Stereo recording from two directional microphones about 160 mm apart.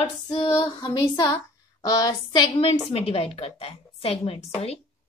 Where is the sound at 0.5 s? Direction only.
25° left (ahead or behind).